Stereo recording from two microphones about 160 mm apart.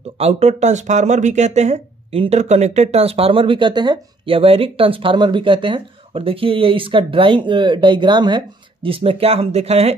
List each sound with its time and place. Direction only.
0.2 s speech: 40° right (ahead or behind)